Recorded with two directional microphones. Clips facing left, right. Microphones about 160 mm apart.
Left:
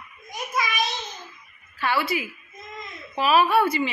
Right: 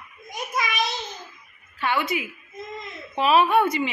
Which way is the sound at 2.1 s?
20° right (ahead or behind).